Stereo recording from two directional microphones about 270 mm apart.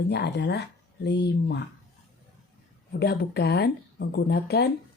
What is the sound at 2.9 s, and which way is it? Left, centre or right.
Speech, left.